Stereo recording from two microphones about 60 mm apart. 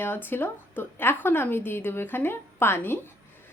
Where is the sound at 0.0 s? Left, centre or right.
Left.